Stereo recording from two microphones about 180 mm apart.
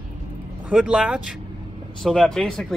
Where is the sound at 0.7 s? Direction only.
5° right (ahead or behind).